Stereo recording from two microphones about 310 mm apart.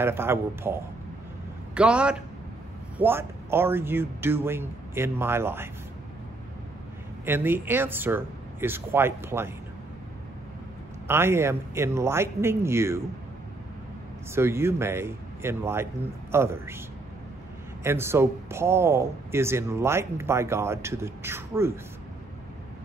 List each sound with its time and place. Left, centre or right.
0.0 s speech: centre
1.8 s a man's voice: centre
7.2 s speech: centre
11.1 s speech: centre
14.3 s speech: centre
17.8 s speech: centre